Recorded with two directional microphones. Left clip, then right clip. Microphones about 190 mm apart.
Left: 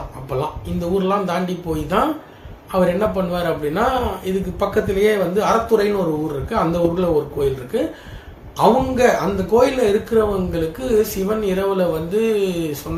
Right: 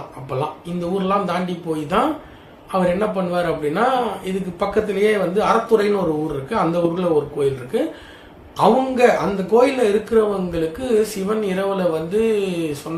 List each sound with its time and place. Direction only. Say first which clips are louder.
0.3 s speech: left 1 dB; centre (ahead or behind)